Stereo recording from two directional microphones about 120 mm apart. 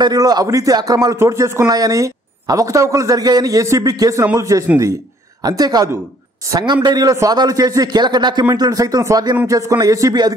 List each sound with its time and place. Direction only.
0.0 s a man's voice: 35° right (ahead or behind)